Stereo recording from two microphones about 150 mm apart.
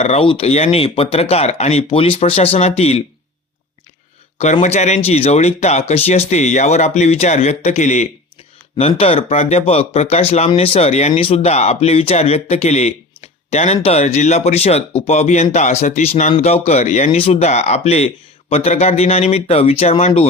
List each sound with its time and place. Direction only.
0.0 s speech: 40° left (ahead or behind)
4.6 s speech: 50° left (ahead or behind)